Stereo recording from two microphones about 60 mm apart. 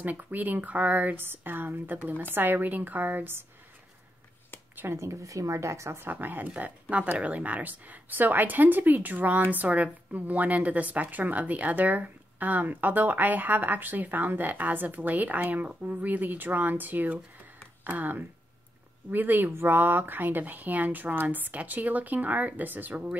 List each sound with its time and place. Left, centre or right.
0.0 s speech: right
4.9 s a woman's voice: right
6.1 s a woman's voice: right